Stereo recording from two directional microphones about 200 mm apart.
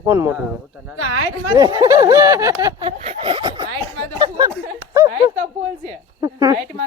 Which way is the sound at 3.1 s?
25° right (ahead or behind).